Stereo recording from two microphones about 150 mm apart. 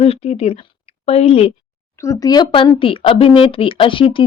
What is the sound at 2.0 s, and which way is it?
Speech, 25° left (ahead or behind).